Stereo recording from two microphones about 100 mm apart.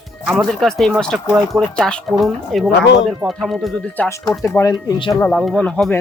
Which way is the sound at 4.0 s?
15° left (ahead or behind).